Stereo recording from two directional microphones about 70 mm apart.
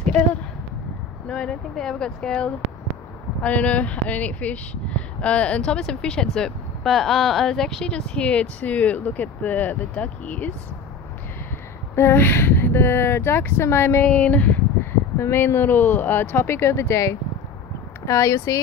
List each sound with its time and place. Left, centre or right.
1.2 s speech: centre
11.9 s speech: left
14.0 s speech: centre; by 18.6 s left